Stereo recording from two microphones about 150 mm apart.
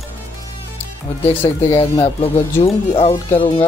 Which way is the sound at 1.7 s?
40° left (ahead or behind).